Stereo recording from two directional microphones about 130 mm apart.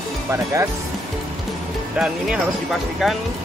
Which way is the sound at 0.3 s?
20° right (ahead or behind).